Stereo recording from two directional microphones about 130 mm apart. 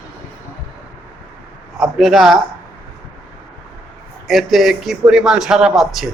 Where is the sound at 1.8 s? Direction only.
Centre (ahead or behind).